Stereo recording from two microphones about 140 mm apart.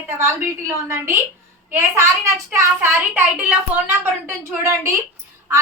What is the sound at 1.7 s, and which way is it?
A woman's voice, 20° right (ahead or behind).